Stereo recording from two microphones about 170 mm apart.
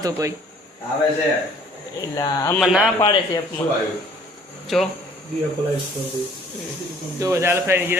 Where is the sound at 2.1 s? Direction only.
20° left (ahead or behind).